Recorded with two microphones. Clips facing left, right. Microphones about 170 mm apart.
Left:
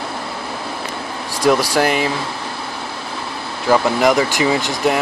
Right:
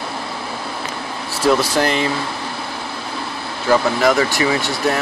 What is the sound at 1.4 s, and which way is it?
Speech, 10° left (ahead or behind).